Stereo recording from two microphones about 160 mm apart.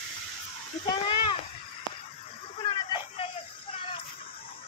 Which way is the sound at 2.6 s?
35° left (ahead or behind).